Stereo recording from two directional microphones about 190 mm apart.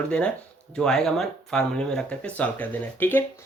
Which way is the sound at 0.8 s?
5° left (ahead or behind).